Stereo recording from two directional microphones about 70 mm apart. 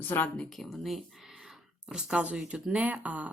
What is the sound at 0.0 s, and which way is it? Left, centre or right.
Speech, left.